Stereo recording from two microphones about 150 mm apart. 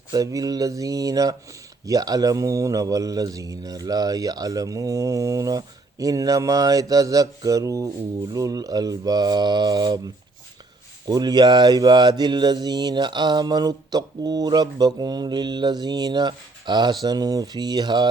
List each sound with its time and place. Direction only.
0.1 s speech: 25° right (ahead or behind)
11.1 s speech: 30° right (ahead or behind)